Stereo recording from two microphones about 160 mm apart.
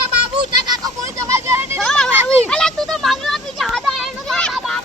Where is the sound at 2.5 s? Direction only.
5° left (ahead or behind).